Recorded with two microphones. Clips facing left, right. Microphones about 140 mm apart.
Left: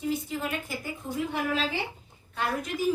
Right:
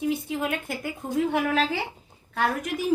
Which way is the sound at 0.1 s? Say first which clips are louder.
Right 3 dB; 60° right (ahead or behind).